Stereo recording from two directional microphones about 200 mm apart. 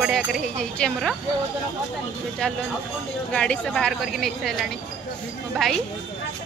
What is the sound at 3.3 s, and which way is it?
Speech, 5° left (ahead or behind).